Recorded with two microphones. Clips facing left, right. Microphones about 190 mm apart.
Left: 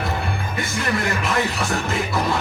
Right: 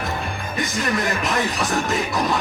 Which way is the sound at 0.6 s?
20° right (ahead or behind).